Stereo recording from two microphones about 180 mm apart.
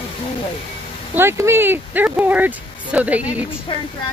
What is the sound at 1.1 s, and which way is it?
Speech, 15° right (ahead or behind).